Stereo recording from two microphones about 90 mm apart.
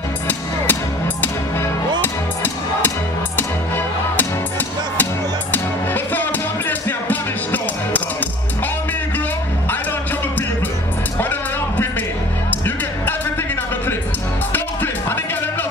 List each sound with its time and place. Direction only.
0.3 s music: 20° left (ahead or behind)
12.4 s music: 20° left (ahead or behind)
14.5 s music: 20° left (ahead or behind)